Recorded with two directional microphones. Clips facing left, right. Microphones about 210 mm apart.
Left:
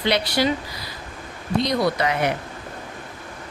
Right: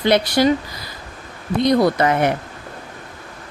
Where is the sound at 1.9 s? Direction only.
50° right (ahead or behind).